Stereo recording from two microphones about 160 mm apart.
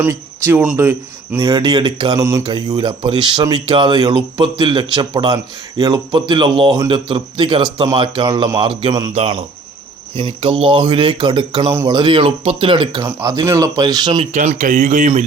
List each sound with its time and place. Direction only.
0.0 s speech: 15° right (ahead or behind)
9.1 s speech: 35° right (ahead or behind)
11.7 s speech: 15° right (ahead or behind)
11.9 s speech: 30° right (ahead or behind)
14.2 s speech: 50° right (ahead or behind)